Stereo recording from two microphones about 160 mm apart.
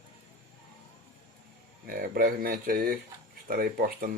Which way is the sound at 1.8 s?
65° right (ahead or behind).